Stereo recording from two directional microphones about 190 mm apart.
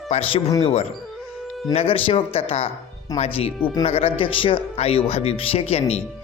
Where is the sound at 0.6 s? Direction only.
35° left (ahead or behind).